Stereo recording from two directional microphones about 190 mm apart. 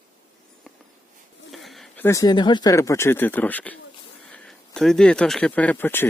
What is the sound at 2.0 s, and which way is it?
Speech, 15° left (ahead or behind).